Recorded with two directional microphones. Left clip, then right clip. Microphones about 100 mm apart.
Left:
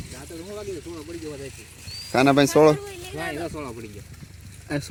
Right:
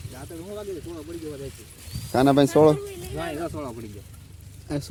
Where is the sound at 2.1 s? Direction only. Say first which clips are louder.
Left 1 dB; 30° right (ahead or behind).